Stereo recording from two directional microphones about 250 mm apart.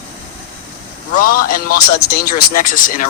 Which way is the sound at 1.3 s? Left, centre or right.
Left.